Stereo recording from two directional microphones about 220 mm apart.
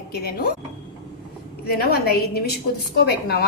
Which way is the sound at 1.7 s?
45° left (ahead or behind).